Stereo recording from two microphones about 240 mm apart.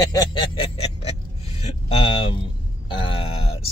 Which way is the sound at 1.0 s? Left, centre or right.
Left.